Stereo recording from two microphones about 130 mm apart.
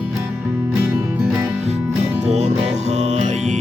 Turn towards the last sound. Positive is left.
turn(degrees=-60)  # may be behind; listen again after turning